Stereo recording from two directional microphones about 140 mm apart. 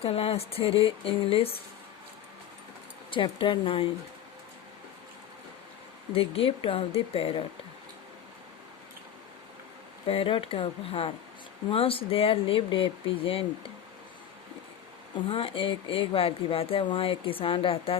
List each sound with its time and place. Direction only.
0.0 s speech: 45° left (ahead or behind)
3.1 s speech: 35° left (ahead or behind)
6.1 s speech: 40° left (ahead or behind)
10.1 s speech: 40° left (ahead or behind)
15.3 s speech: 40° left (ahead or behind)